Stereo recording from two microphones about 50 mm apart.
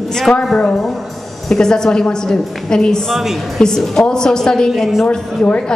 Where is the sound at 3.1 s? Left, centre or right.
Centre.